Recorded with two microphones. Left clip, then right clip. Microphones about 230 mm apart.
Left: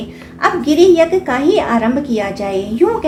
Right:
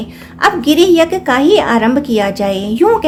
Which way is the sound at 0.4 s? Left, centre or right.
Right.